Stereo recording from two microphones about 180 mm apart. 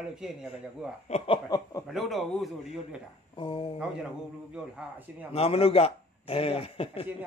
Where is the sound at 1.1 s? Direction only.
35° left (ahead or behind).